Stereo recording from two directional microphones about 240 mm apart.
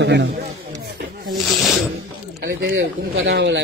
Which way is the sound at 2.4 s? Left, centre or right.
Right.